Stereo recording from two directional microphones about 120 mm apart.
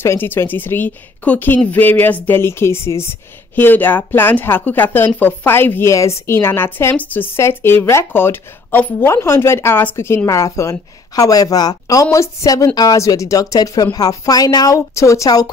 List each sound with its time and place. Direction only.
0.0 s a woman's voice: 20° left (ahead or behind)